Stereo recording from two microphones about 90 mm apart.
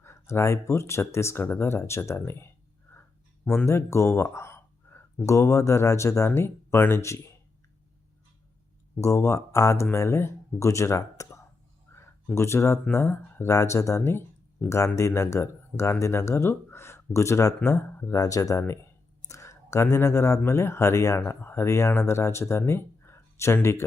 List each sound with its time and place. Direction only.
0.0 s speech: 30° left (ahead or behind)
3.4 s speech: 15° left (ahead or behind)
3.7 s speech: 30° left (ahead or behind)
9.0 s speech: 35° left (ahead or behind)
11.9 s a sound: 30° left (ahead or behind)
12.9 s speech: 30° left (ahead or behind)
18.2 s speech: 40° left (ahead or behind)